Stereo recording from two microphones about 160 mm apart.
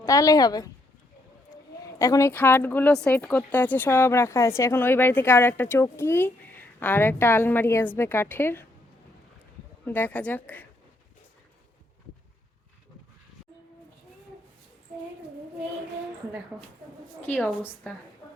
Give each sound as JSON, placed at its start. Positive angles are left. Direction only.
{"t": 0.0, "sound": "a woman's voice", "side_deg": 20}
{"t": 2.0, "sound": "speech", "side_deg": 20}
{"t": 9.8, "sound": "speech", "side_deg": 10}
{"t": 17.2, "sound": "speech", "side_deg": 10}